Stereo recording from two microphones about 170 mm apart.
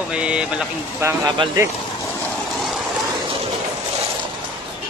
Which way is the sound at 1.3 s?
30° right (ahead or behind).